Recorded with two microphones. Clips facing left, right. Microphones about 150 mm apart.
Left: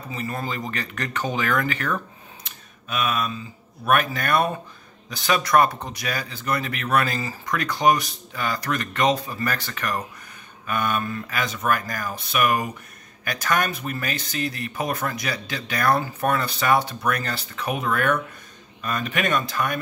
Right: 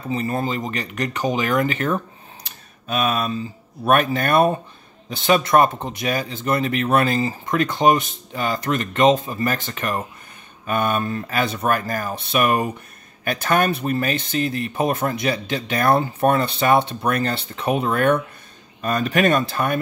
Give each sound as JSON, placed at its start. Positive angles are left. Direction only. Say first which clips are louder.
{"t": 0.1, "sound": "speech", "louder": "right 7 dB", "side_deg": -30}
{"t": 2.4, "sound": "a sound", "louder": "right 6 dB", "side_deg": -35}
{"t": 3.8, "sound": "speech", "louder": "right 4 dB", "side_deg": -30}